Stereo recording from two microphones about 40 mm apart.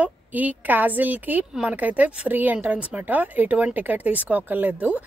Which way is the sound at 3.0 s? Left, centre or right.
Right.